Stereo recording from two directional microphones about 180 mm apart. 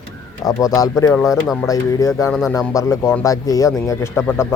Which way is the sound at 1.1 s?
Centre (ahead or behind).